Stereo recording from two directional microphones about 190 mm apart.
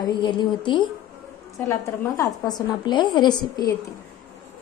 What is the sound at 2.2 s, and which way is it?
A woman's voice, 20° left (ahead or behind).